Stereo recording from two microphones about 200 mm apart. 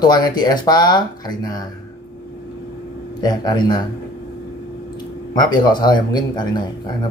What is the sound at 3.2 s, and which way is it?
Speech, 20° left (ahead or behind).